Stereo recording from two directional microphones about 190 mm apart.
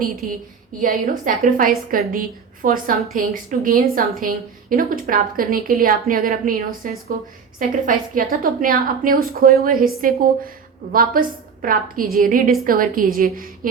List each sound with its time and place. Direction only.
0.2 s a woman's voice: 50° right (ahead or behind)